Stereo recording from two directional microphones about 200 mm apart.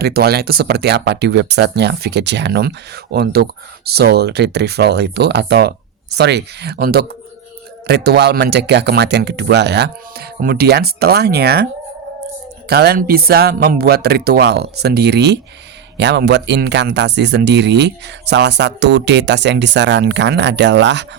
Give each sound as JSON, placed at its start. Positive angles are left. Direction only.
{"t": 0.0, "sound": "speech", "side_deg": -50}